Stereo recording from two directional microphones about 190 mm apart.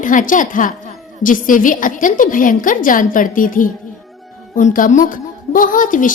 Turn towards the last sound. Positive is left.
turn(degrees=45)  # may be behind; listen again after turning